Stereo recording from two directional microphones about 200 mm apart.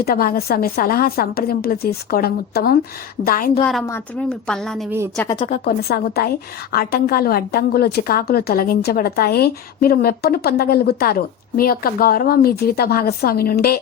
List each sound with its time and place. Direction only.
0.0 s a woman's voice: 45° left (ahead or behind)
3.8 s speech: 10° left (ahead or behind)
5.6 s a woman's voice: 50° left (ahead or behind)